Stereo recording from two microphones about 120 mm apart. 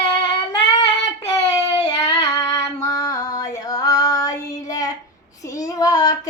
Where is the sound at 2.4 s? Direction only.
25° left (ahead or behind).